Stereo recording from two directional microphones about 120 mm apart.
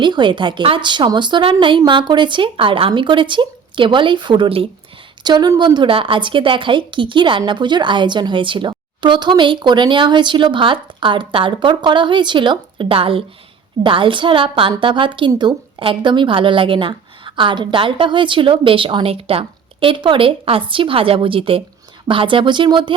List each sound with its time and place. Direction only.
0.0 s a woman's voice: 40° right (ahead or behind)